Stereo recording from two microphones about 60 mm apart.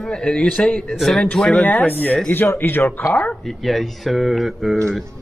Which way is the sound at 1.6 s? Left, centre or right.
Left.